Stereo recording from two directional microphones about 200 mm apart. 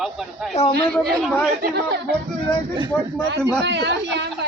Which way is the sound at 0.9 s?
5° left (ahead or behind).